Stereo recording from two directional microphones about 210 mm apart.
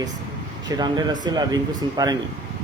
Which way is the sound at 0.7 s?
20° right (ahead or behind).